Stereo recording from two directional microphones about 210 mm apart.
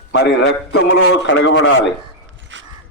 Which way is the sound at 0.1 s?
55° left (ahead or behind).